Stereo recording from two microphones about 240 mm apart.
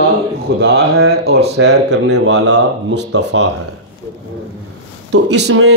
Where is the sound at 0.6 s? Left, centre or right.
Right.